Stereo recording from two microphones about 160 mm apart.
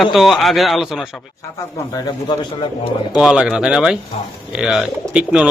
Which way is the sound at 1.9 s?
25° left (ahead or behind).